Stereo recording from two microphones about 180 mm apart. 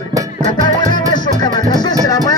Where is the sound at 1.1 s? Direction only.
25° left (ahead or behind).